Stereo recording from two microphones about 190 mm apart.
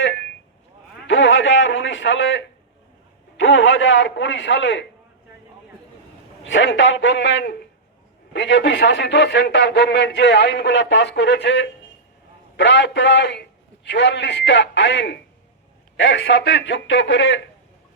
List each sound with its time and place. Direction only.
1.0 s a man's voice: 75° left (ahead or behind)
6.4 s a man's voice: 75° left (ahead or behind)